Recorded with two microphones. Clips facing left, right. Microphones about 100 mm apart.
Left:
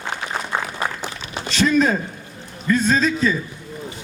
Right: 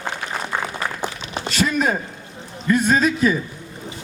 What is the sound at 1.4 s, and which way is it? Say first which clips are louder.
A man's voice: left 3 dB; 5° right (ahead or behind).